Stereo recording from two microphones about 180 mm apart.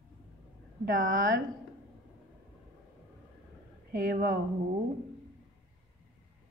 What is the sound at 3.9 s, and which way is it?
Speech, 55° right (ahead or behind).